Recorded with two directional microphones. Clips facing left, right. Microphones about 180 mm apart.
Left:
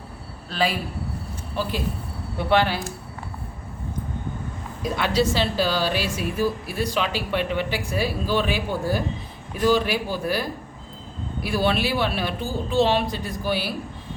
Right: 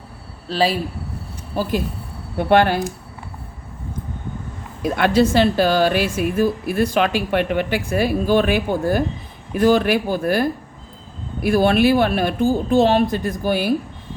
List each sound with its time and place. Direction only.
0.4 s a man's voice: 35° right (ahead or behind); by 2.8 s 50° right (ahead or behind)
4.8 s a woman's voice: 55° right (ahead or behind)